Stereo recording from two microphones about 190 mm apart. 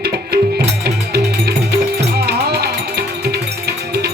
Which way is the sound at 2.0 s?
60° right (ahead or behind).